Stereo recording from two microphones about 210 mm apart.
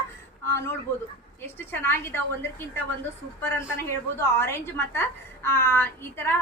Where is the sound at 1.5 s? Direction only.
10° left (ahead or behind).